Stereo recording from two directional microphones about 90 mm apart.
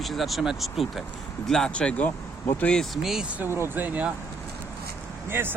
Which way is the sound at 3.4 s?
25° right (ahead or behind).